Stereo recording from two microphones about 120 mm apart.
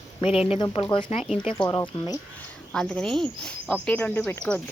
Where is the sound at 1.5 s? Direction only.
40° left (ahead or behind).